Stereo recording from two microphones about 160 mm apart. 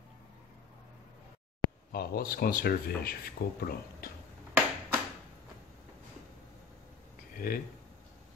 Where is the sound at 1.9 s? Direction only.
70° left (ahead or behind).